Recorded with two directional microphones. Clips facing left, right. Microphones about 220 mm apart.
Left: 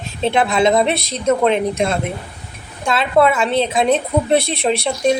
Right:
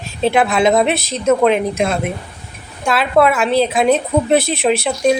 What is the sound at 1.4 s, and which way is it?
Speech, 30° left (ahead or behind).